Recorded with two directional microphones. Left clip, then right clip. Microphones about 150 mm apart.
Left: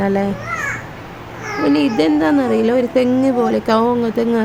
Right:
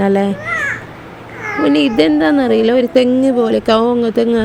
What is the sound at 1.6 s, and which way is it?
Speech, 30° right (ahead or behind).